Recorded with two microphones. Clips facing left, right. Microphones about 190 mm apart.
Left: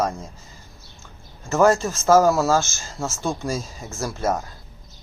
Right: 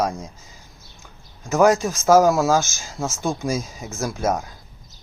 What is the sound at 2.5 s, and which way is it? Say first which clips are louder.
Speech: right 1 dB; 15° right (ahead or behind).